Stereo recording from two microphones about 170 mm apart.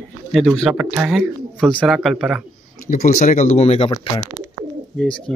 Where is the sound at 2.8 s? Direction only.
45° left (ahead or behind).